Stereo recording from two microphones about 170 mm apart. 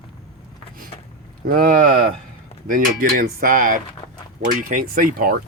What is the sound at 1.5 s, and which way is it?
Speech, 55° right (ahead or behind).